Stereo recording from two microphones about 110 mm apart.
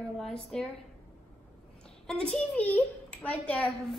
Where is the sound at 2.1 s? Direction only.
5° left (ahead or behind).